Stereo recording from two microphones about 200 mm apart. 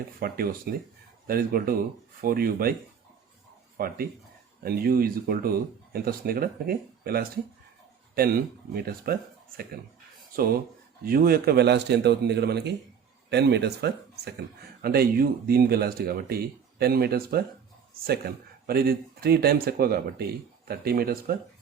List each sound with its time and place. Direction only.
0.2 s speech: 50° right (ahead or behind)
3.8 s speech: 50° right (ahead or behind)
10.3 s a man's voice: 50° right (ahead or behind)